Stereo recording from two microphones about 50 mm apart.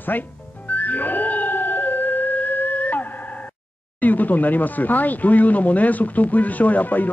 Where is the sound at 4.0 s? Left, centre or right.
Left.